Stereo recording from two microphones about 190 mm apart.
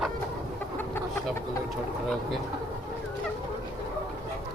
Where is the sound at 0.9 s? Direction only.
15° left (ahead or behind).